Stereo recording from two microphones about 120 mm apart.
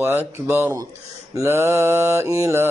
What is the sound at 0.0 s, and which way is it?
Mantra, 25° right (ahead or behind).